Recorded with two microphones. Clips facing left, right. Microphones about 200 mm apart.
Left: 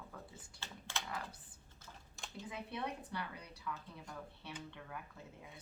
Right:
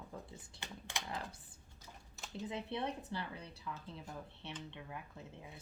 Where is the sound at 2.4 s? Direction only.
25° right (ahead or behind).